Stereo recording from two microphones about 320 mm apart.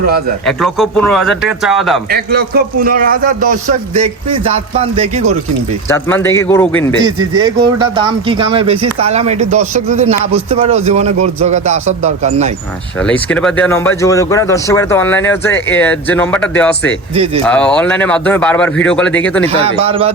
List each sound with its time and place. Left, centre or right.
0.4 s speech: centre
2.0 s speech: right
5.9 s a man's voice: centre
7.0 s speech: centre
13.0 s speech: centre
19.6 s speech: centre